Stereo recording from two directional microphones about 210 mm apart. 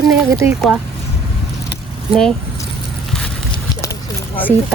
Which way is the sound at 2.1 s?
Centre (ahead or behind).